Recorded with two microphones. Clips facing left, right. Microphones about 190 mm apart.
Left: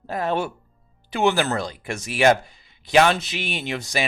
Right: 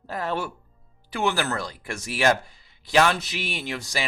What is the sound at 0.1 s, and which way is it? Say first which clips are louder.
A man's voice: left 4 dB; 20° left (ahead or behind).